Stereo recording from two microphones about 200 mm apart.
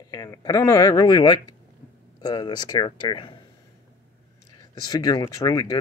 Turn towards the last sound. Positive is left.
turn(degrees=20)  # may be behind; listen again after turning